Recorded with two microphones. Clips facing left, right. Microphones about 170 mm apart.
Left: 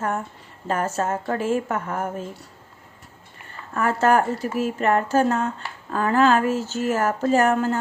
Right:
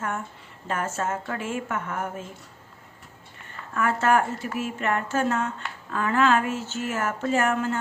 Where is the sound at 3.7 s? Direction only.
35° left (ahead or behind).